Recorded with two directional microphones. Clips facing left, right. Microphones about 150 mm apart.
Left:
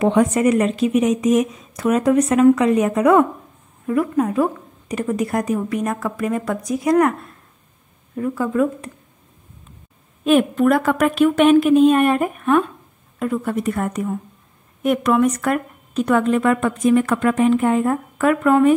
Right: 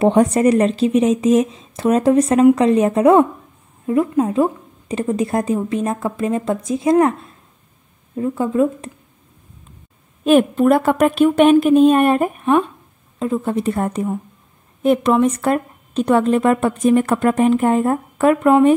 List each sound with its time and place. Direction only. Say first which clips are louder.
0.0 s a woman's voice: right 2 dB; 35° right (ahead or behind)
8.2 s speech: right 2 dB; 25° right (ahead or behind)
10.5 s a woman's voice: right 2 dB; 30° right (ahead or behind)
13.2 s a woman's voice: right 2 dB; 25° right (ahead or behind)